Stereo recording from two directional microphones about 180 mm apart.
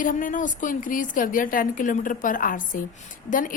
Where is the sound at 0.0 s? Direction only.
50° left (ahead or behind).